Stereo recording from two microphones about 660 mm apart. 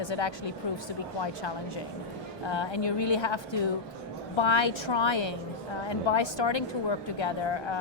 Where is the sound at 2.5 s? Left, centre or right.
Left.